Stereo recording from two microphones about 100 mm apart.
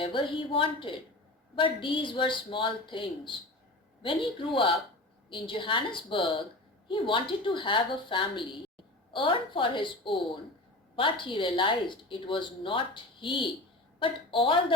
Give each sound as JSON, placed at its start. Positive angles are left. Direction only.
{"t": 0.0, "sound": "a woman's voice", "side_deg": 60}